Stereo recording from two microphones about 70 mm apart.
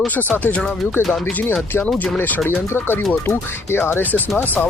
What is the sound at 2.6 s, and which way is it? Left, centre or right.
Speech, left.